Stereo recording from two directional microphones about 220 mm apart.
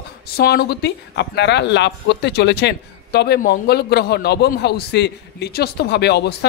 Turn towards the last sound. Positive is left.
turn(degrees=50)  # may be behind; listen again after turning